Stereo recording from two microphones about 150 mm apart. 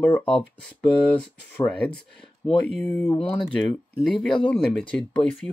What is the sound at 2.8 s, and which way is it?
Speech, 15° left (ahead or behind).